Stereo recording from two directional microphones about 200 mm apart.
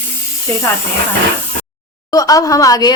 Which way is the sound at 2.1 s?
15° left (ahead or behind).